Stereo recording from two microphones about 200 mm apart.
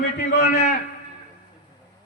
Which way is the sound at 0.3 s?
55° left (ahead or behind).